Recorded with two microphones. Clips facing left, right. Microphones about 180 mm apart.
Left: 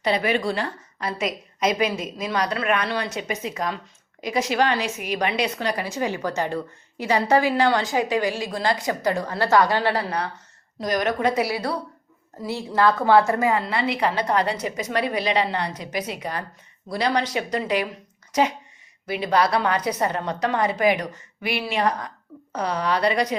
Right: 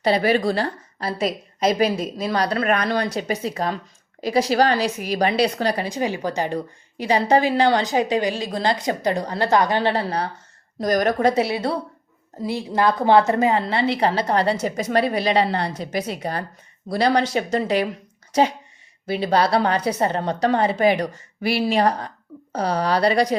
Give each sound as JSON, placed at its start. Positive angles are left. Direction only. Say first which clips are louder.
{"t": 0.0, "sound": "a woman's voice", "louder": "right 4 dB", "side_deg": -35}
{"t": 5.8, "sound": "a woman's voice", "louder": "right 2 dB", "side_deg": -15}
{"t": 10.8, "sound": "a woman's voice", "louder": "right 4 dB", "side_deg": -40}
{"t": 11.4, "sound": "a woman's voice", "louder": "right 3 dB", "side_deg": -25}
{"t": 14.6, "sound": "a woman's voice", "louder": "right 4 dB", "side_deg": -40}